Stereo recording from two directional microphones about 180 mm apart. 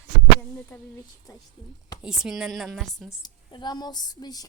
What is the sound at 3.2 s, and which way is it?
A woman's voice, 25° left (ahead or behind).